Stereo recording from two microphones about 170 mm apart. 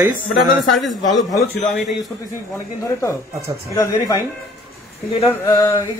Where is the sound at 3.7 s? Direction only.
20° left (ahead or behind).